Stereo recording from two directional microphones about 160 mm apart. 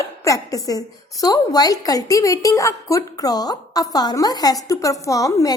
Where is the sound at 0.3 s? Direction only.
20° left (ahead or behind).